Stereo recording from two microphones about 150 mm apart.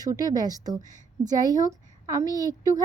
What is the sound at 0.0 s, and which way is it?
Speech, 25° right (ahead or behind).